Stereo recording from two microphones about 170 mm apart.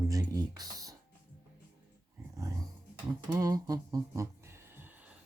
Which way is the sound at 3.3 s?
20° right (ahead or behind).